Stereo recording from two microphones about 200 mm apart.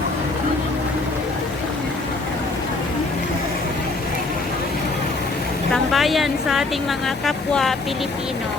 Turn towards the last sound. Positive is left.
turn(degrees=0)  # may be behind; listen again after turning